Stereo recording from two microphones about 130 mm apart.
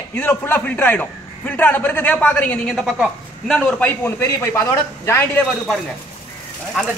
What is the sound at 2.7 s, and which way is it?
A man's voice, centre (ahead or behind).